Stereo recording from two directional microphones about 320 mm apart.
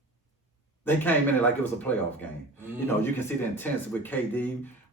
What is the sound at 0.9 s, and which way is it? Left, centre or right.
Speech, centre.